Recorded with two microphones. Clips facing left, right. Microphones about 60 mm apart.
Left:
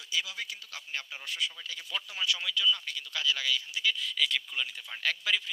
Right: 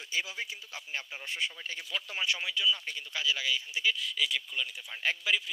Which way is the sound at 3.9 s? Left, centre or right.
Centre.